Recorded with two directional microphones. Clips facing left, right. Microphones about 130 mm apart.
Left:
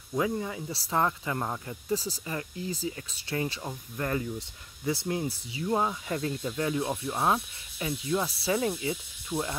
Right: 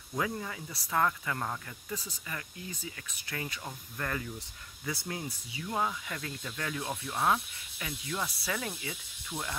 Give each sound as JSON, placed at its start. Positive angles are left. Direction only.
{"t": 0.2, "sound": "speech", "side_deg": 20}
{"t": 0.7, "sound": "speech", "side_deg": 30}
{"t": 9.3, "sound": "speech", "side_deg": 10}